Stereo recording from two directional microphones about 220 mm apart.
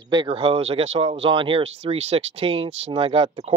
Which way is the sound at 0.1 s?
20° right (ahead or behind).